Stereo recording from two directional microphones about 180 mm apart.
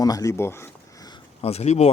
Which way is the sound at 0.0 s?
20° left (ahead or behind).